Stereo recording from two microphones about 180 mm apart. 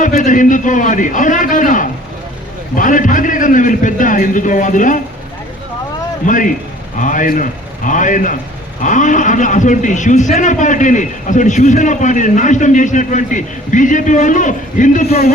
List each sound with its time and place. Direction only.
0.0 s a man's voice: 45° left (ahead or behind)
6.2 s a man's voice: 45° left (ahead or behind)